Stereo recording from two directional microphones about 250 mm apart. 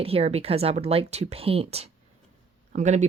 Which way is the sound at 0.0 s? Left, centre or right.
Right.